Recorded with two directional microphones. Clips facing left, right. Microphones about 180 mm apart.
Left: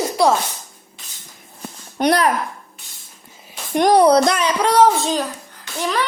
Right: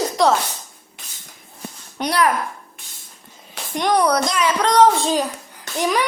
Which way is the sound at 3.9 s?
30° left (ahead or behind).